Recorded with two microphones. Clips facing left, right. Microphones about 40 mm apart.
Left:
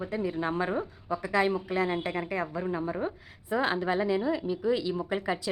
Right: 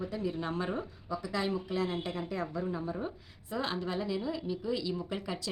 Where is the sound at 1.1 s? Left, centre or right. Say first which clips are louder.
Left 7 dB; left.